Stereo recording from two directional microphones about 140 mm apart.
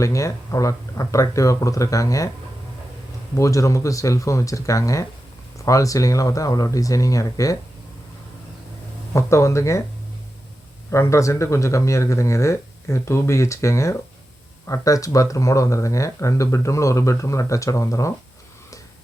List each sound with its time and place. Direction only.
0.0 s speech: 20° left (ahead or behind)
3.3 s speech: 20° left (ahead or behind)
9.1 s speech: 20° left (ahead or behind)
10.9 s speech: 20° left (ahead or behind)